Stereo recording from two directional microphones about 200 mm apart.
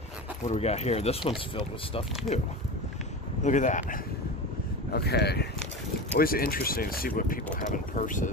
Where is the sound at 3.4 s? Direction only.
40° left (ahead or behind).